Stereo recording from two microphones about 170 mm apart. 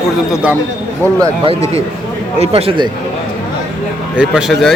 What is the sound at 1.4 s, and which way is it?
Speech, 40° right (ahead or behind).